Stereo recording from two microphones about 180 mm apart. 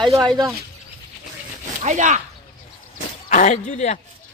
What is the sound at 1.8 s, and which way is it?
Speech, 40° right (ahead or behind).